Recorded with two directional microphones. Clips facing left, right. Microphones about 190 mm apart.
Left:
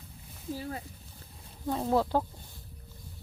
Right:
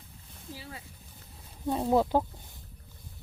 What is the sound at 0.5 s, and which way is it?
Speech, 45° left (ahead or behind).